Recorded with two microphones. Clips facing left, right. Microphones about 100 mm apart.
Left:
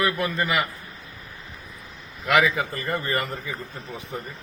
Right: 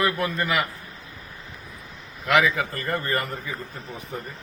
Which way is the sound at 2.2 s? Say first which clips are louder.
Even; 5° left (ahead or behind).